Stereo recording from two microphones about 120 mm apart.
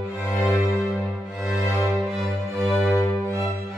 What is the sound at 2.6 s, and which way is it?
Music, 15° left (ahead or behind).